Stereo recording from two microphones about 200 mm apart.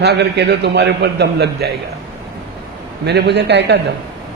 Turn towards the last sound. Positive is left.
turn(degrees=-60)  # may be behind; listen again after turning